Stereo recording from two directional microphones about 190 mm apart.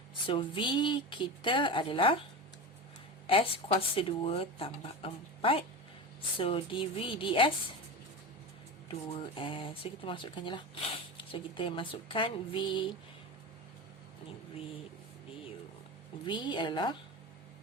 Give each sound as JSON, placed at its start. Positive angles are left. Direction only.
{"t": 0.3, "sound": "speech", "side_deg": 25}
{"t": 3.2, "sound": "speech", "side_deg": 30}
{"t": 8.9, "sound": "speech", "side_deg": 25}
{"t": 16.2, "sound": "speech", "side_deg": 25}